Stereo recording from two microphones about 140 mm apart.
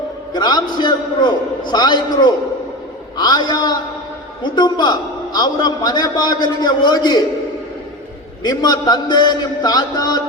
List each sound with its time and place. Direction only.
0.3 s a man's voice: 30° left (ahead or behind)
8.4 s a man's voice: 30° left (ahead or behind)